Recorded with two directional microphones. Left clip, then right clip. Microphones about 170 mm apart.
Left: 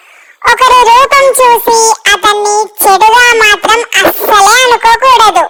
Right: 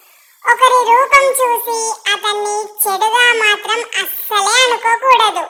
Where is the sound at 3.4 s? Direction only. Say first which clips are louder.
Left 8 dB; 50° left (ahead or behind).